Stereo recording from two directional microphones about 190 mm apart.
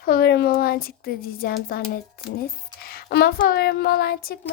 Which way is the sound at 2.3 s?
50° left (ahead or behind).